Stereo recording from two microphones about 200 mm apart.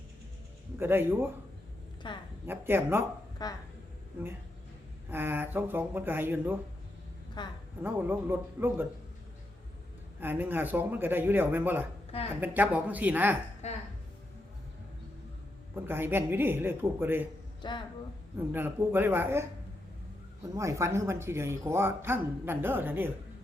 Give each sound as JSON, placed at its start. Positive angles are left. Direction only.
{"t": 0.8, "sound": "speech", "side_deg": -10}
{"t": 2.0, "sound": "a woman's voice", "side_deg": 25}
{"t": 2.5, "sound": "speech", "side_deg": -10}
{"t": 3.4, "sound": "a woman's voice", "side_deg": 20}
{"t": 5.1, "sound": "speech", "side_deg": -10}
{"t": 7.4, "sound": "a woman's voice", "side_deg": 20}
{"t": 7.8, "sound": "speech", "side_deg": -10}
{"t": 10.2, "sound": "speech", "side_deg": -10}
{"t": 13.6, "sound": "speech", "side_deg": 35}
{"t": 15.7, "sound": "speech", "side_deg": -10}
{"t": 17.6, "sound": "speech", "side_deg": 25}
{"t": 18.3, "sound": "speech", "side_deg": -10}
{"t": 20.6, "sound": "speech", "side_deg": -15}